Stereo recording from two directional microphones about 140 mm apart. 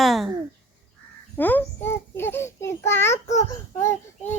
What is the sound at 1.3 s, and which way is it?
A child's voice, 15° left (ahead or behind).